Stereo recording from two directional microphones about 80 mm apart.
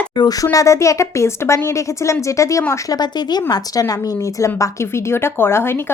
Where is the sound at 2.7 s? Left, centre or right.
Left.